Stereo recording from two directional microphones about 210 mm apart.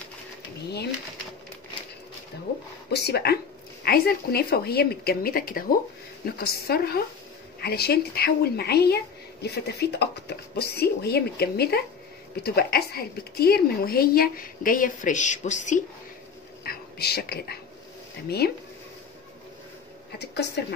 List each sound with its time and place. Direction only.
2.9 s a woman's voice: 50° left (ahead or behind); by 15.8 s 35° left (ahead or behind)
16.6 s a sound: 50° left (ahead or behind)
18.4 s a woman's voice: 50° left (ahead or behind)
20.2 s a woman's voice: 50° left (ahead or behind)